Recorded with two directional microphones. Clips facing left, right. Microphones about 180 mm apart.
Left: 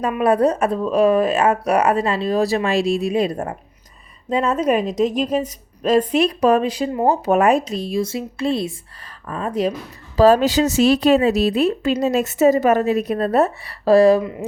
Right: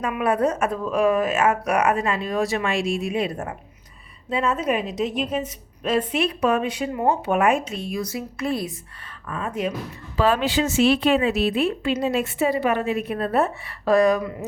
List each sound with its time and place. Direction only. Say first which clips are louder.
0.0 s a woman's voice: left 5 dB; 35° left (ahead or behind)